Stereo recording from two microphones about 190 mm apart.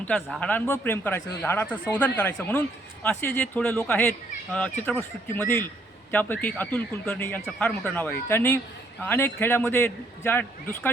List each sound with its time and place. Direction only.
0.1 s a man's voice: 5° left (ahead or behind)
5.3 s a man's voice: 10° left (ahead or behind)